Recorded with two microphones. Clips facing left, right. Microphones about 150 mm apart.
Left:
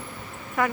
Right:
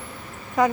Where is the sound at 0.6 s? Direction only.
20° right (ahead or behind).